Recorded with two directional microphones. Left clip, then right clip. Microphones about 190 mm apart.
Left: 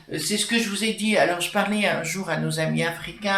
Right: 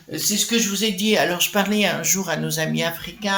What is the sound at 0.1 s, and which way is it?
Speech, 45° right (ahead or behind).